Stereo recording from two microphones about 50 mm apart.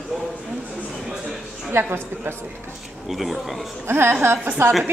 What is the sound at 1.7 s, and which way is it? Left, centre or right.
Speech, right.